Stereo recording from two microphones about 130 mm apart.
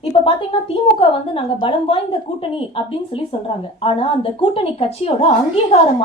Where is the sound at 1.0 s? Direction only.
40° left (ahead or behind).